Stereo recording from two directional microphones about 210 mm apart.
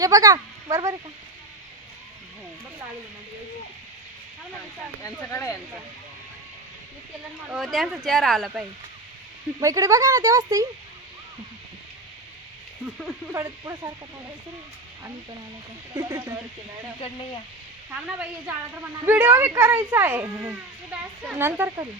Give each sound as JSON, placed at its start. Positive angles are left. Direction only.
{"t": 0.0, "sound": "speech", "side_deg": -15}
{"t": 5.0, "sound": "speech", "side_deg": 15}
{"t": 7.4, "sound": "speech", "side_deg": 0}
{"t": 9.6, "sound": "speech", "side_deg": -15}
{"t": 13.3, "sound": "speech", "side_deg": -15}
{"t": 16.0, "sound": "speech", "side_deg": -15}
{"t": 17.9, "sound": "speech", "side_deg": -5}